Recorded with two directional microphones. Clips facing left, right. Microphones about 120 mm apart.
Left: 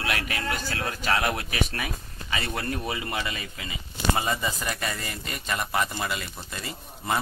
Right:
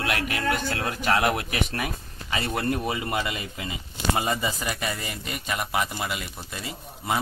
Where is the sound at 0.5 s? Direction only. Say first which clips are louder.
Right 7 dB; 55° right (ahead or behind).